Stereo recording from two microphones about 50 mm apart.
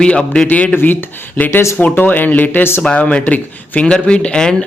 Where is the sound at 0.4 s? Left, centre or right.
Left.